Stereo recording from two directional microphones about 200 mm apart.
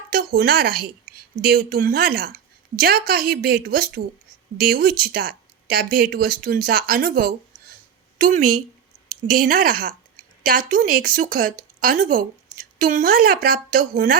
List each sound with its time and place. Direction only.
0.1 s a woman's voice: 45° right (ahead or behind)